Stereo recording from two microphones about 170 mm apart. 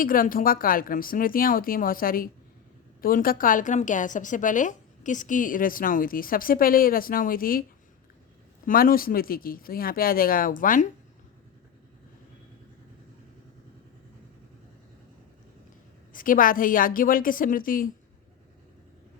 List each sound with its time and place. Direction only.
0.0 s a woman's voice: 55° left (ahead or behind)
8.6 s speech: 55° left (ahead or behind)
16.1 s speech: 55° left (ahead or behind)